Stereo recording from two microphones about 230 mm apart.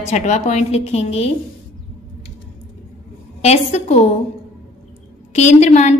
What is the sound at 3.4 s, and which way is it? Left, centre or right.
Speech, left.